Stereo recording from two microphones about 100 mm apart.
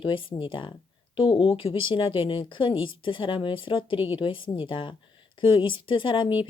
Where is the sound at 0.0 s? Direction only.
60° left (ahead or behind).